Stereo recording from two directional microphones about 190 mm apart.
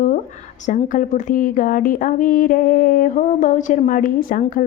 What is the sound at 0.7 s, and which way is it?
Speech, 45° left (ahead or behind).